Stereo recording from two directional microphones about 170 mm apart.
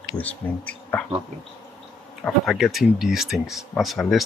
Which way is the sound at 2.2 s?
Centre (ahead or behind).